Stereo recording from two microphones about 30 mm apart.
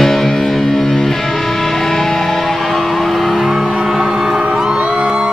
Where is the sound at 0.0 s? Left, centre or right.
Centre.